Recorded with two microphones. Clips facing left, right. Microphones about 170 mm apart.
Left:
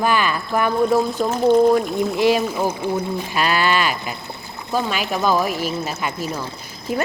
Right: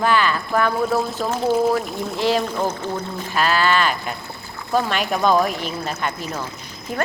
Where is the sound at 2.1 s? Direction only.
15° left (ahead or behind).